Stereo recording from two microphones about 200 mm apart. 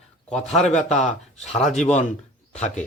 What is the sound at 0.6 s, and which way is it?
Speech, 35° left (ahead or behind).